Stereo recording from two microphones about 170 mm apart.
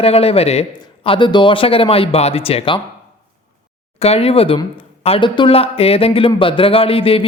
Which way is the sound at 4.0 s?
35° left (ahead or behind).